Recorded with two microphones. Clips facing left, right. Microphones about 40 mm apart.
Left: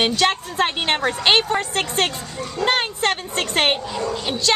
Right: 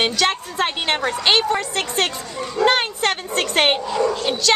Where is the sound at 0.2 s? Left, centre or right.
Centre.